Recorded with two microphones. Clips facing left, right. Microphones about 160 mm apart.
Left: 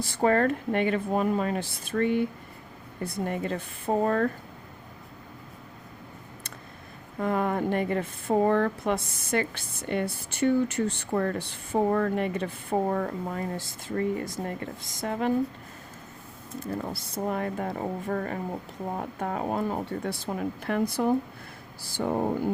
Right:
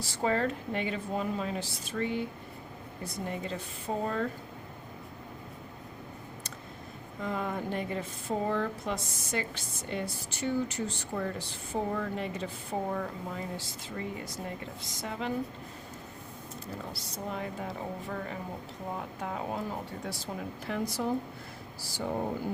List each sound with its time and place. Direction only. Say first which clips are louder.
0.0 s a woman's voice: left 6 dB; 55° left (ahead or behind)
7.2 s a woman's voice: left 7 dB; 60° left (ahead or behind)
16.9 s a woman's voice: left 7 dB; 55° left (ahead or behind)